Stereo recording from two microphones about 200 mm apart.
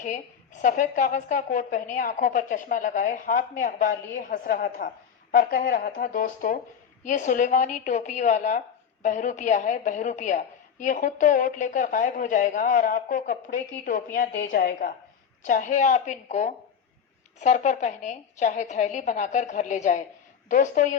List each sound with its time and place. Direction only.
0.0 s a woman's voice: 40° left (ahead or behind)